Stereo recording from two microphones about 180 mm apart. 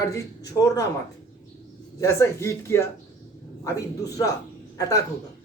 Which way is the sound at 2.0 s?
15° left (ahead or behind).